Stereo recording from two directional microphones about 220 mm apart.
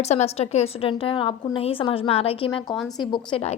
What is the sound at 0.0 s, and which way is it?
A woman's voice, 30° left (ahead or behind).